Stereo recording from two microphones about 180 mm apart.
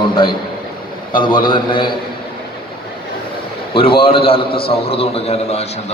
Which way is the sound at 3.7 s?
30° left (ahead or behind).